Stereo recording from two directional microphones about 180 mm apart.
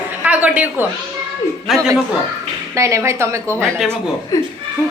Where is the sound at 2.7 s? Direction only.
15° right (ahead or behind).